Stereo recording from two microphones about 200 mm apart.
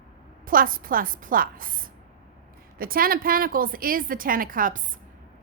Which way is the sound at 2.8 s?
45° right (ahead or behind).